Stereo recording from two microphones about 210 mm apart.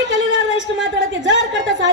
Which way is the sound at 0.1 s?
60° right (ahead or behind).